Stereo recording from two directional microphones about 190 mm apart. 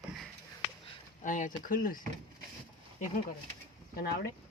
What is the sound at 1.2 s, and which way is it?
Speech, 45° left (ahead or behind).